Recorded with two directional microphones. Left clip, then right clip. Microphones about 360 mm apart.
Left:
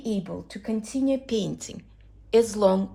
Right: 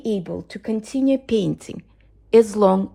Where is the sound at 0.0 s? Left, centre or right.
Right.